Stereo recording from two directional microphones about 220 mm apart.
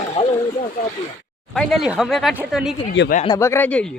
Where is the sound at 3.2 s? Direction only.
15° left (ahead or behind).